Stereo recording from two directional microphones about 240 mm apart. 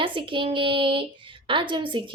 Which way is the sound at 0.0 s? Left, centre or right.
Right.